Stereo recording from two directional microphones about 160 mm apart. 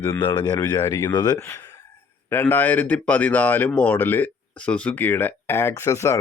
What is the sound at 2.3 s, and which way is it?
Speech, 15° left (ahead or behind).